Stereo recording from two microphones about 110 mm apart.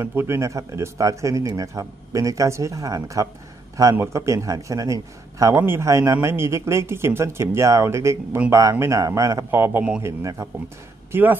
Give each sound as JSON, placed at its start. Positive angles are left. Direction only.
{"t": 0.0, "sound": "speech", "side_deg": -25}